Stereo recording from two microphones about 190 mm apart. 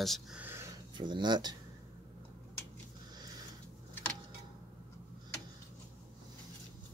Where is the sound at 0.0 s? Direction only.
Centre (ahead or behind); by 1.6 s 20° right (ahead or behind).